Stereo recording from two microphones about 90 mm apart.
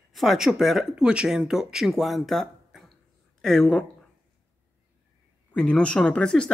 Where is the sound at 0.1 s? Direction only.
Centre (ahead or behind).